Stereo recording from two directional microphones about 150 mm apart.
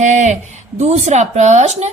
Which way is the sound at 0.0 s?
50° right (ahead or behind).